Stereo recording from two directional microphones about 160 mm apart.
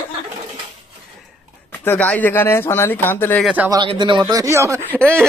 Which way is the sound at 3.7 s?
30° right (ahead or behind).